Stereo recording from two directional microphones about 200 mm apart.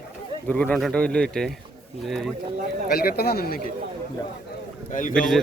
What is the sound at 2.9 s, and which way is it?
Speech, 50° left (ahead or behind).